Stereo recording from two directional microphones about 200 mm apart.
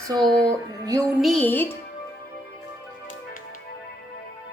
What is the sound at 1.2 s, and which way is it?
Music, 5° left (ahead or behind).